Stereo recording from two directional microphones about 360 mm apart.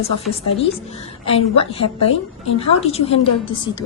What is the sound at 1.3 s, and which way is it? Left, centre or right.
A woman's voice, centre.